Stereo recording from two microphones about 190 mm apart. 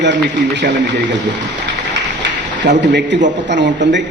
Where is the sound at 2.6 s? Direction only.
65° right (ahead or behind).